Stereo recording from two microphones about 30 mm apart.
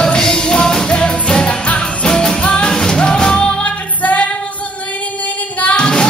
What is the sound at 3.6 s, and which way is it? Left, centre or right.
Music, left.